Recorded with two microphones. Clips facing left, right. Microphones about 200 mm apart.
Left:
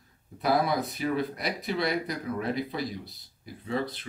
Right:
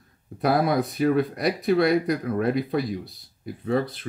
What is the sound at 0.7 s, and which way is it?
Speech, 55° right (ahead or behind).